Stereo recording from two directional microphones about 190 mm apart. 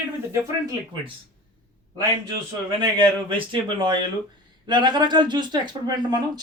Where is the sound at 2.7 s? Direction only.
25° right (ahead or behind).